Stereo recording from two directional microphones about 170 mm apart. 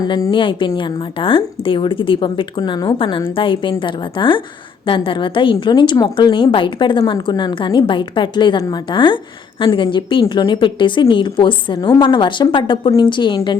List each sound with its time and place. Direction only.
0.0 s a woman's voice: 25° left (ahead or behind)